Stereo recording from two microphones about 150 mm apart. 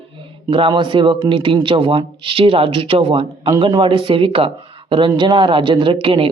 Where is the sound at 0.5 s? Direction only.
35° right (ahead or behind).